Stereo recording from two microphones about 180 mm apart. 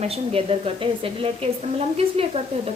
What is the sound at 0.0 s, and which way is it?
Speech, 35° right (ahead or behind).